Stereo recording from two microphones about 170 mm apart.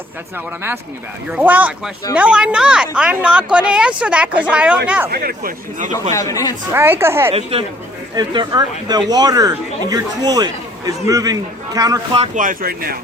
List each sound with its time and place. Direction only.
1.3 s a woman's voice: 10° right (ahead or behind)
5.1 s speech: 60° right (ahead or behind)
6.1 s a man's voice: 20° left (ahead or behind)
6.7 s a woman's voice: 15° right (ahead or behind)
7.3 s a woman's voice: 35° right (ahead or behind)
8.1 s speech: 25° right (ahead or behind)
12.2 s speech: 50° right (ahead or behind)